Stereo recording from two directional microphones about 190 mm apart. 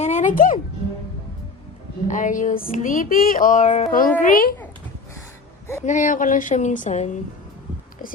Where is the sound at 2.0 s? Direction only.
40° left (ahead or behind).